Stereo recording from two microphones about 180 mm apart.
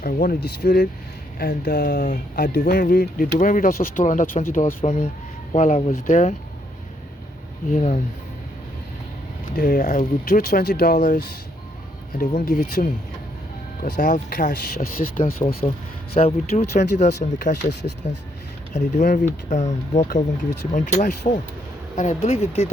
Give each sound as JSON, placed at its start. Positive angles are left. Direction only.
{"t": 0.0, "sound": "speech", "side_deg": 55}
{"t": 1.4, "sound": "speech", "side_deg": 50}
{"t": 7.7, "sound": "speech", "side_deg": 45}
{"t": 9.6, "sound": "speech", "side_deg": 50}
{"t": 15.4, "sound": "speech", "side_deg": 30}
{"t": 17.5, "sound": "speech", "side_deg": 70}
{"t": 18.7, "sound": "speech", "side_deg": 45}